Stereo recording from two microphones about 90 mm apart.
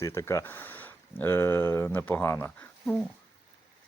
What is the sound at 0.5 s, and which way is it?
Speech, 20° left (ahead or behind).